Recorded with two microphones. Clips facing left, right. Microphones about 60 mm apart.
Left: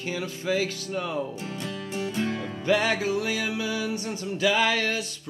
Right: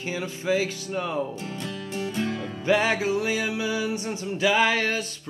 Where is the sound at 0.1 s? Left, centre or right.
Centre.